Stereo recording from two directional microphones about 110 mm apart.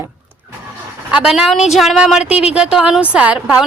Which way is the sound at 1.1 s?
5° right (ahead or behind).